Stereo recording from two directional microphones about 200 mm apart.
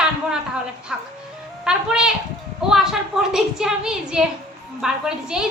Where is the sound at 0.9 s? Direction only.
5° right (ahead or behind).